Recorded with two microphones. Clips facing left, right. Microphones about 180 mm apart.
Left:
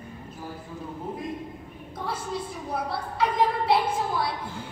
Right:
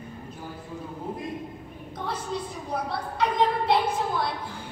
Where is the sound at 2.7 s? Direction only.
5° left (ahead or behind).